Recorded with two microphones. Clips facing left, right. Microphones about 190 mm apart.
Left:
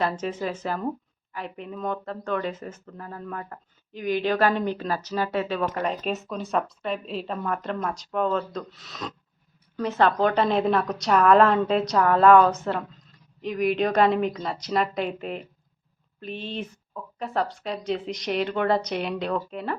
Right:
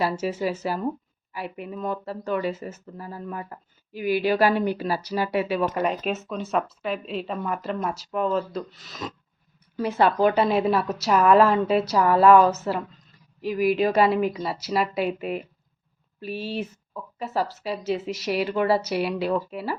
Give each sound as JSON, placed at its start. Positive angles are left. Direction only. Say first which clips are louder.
{"t": 0.0, "sound": "a woman's voice", "louder": "right 2 dB", "side_deg": -10}